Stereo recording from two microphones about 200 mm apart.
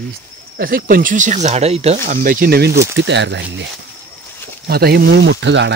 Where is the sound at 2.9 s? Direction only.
65° right (ahead or behind).